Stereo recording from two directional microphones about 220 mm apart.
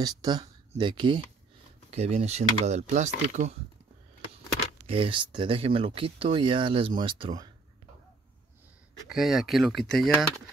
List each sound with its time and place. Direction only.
0.0 s speech: 20° right (ahead or behind)
4.8 s speech: 25° right (ahead or behind)
9.1 s speech: centre (ahead or behind)